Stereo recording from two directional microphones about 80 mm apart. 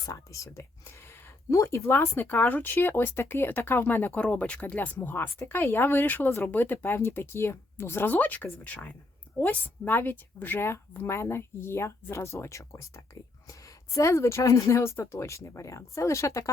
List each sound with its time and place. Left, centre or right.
0.0 s speech: left